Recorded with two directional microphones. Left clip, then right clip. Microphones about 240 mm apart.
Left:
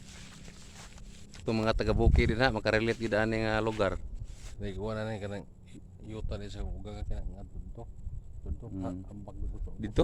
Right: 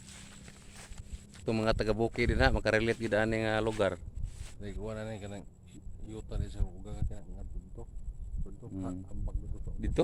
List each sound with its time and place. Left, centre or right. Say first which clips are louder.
0.0 s walk: left 1 dB; centre
1.3 s speech: left 1 dB; centre
4.6 s speech: left 5 dB; left
9.7 s a sound: left 1 dB; left